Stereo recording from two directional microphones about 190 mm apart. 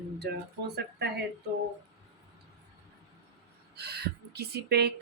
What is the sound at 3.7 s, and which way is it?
Speech, 55° right (ahead or behind).